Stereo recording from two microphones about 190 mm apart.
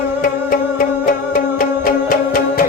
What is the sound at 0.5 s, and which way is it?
Music, 45° left (ahead or behind).